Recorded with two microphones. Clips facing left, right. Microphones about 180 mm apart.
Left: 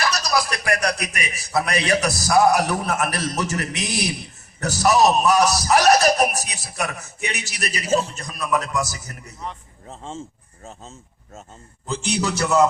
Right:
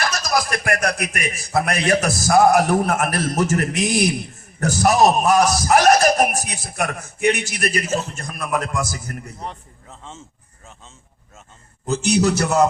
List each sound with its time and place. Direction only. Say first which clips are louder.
0.0 s a man's voice: right 1 dB; 50° right (ahead or behind)
9.9 s speech: left 6 dB; 35° left (ahead or behind)
11.9 s a man's voice: right 6 dB; 45° right (ahead or behind)